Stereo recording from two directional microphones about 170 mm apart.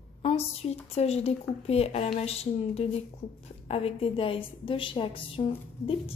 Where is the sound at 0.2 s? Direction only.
35° left (ahead or behind).